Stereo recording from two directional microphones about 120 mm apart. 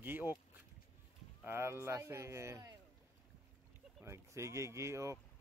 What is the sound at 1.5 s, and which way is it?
Speech, 20° right (ahead or behind).